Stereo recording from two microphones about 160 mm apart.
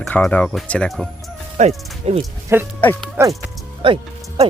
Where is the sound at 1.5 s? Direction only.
40° right (ahead or behind).